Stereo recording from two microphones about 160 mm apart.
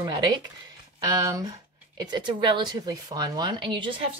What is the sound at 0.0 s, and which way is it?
A woman's voice, 25° right (ahead or behind).